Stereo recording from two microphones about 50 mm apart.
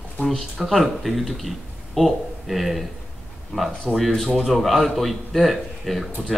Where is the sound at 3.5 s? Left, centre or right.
Centre.